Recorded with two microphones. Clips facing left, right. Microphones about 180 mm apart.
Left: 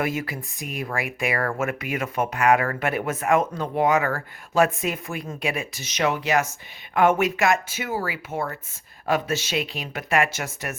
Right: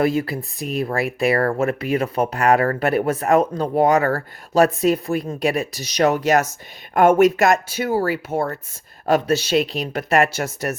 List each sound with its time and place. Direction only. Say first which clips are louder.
0.0 s speech: right 7 dB; 35° right (ahead or behind)